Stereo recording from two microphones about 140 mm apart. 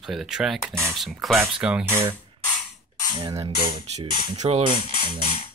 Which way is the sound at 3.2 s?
30° right (ahead or behind).